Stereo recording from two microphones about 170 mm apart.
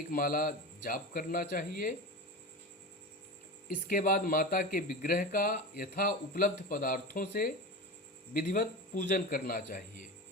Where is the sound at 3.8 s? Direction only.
55° left (ahead or behind).